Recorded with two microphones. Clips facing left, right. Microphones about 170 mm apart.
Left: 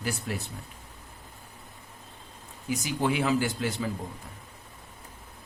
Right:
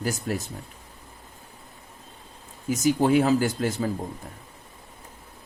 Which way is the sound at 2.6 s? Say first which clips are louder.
Right 7 dB; 45° right (ahead or behind).